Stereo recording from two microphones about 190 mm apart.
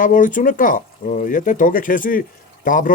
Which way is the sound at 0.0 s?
45° left (ahead or behind).